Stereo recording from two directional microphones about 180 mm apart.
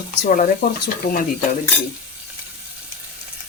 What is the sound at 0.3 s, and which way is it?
Speech, 50° left (ahead or behind).